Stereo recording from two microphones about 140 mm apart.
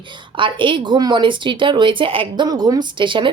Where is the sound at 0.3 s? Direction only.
35° right (ahead or behind).